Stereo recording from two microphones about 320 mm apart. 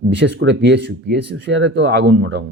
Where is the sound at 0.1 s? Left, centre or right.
Right.